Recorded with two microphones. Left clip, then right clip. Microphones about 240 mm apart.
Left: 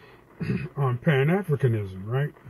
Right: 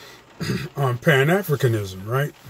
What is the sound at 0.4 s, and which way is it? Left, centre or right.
Speech, centre.